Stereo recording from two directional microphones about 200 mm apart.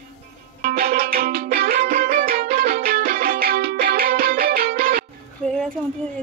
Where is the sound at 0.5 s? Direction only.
50° right (ahead or behind).